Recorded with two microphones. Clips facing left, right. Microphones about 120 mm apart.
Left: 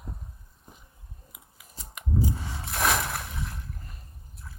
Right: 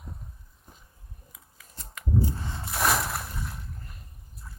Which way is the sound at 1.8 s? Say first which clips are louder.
Left 1 dB; centre (ahead or behind).